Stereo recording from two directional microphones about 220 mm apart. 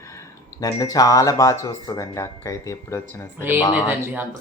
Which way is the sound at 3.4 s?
10° right (ahead or behind).